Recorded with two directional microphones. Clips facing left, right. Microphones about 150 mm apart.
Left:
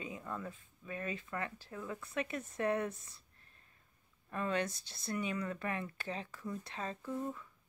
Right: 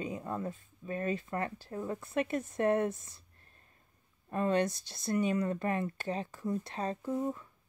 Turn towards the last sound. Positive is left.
turn(degrees=-20)  # may be behind; listen again after turning